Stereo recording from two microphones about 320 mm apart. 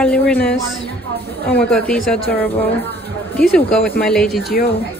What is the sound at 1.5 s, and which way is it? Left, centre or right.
Speech, centre.